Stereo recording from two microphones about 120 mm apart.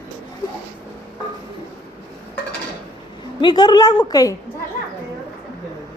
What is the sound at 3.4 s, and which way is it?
Speech, 40° left (ahead or behind).